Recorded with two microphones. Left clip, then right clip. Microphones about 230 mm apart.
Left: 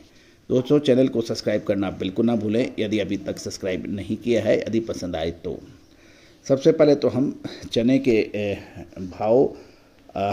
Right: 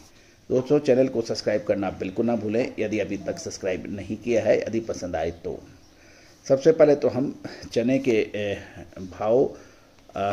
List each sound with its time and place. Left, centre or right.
0.5 s speech: left